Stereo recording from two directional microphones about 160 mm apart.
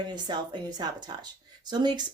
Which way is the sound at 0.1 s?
25° right (ahead or behind).